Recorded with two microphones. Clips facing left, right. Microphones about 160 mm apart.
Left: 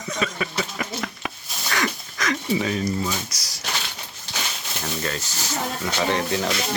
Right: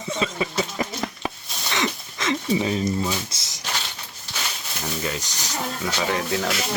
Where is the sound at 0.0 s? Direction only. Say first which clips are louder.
Right 1 dB; 25° right (ahead or behind).